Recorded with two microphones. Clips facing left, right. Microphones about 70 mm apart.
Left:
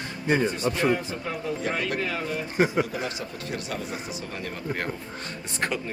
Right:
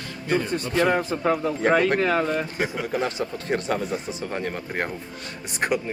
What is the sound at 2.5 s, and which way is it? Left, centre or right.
Speech, left.